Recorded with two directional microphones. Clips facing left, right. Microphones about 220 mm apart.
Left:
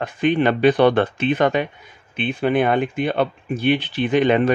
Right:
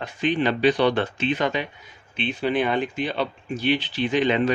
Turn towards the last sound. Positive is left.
turn(degrees=55)  # may be behind; listen again after turning